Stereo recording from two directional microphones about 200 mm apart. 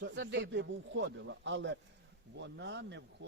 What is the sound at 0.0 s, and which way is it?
Speech, 65° right (ahead or behind).